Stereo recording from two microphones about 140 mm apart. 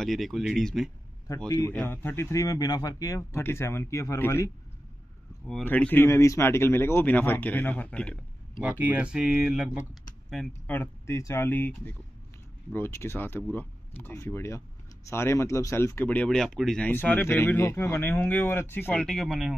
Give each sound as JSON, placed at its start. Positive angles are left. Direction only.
{"t": 0.0, "sound": "speech", "side_deg": 0}
{"t": 1.9, "sound": "speech", "side_deg": 15}
{"t": 5.7, "sound": "speech", "side_deg": 15}
{"t": 8.5, "sound": "speech", "side_deg": -10}
{"t": 10.7, "sound": "speech", "side_deg": 15}